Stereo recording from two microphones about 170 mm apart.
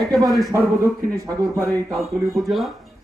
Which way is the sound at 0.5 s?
20° right (ahead or behind).